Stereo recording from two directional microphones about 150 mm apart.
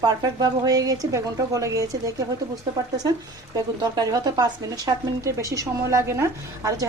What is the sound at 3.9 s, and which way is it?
Speech, 25° right (ahead or behind).